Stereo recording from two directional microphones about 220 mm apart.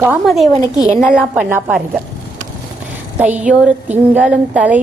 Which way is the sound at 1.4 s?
10° right (ahead or behind).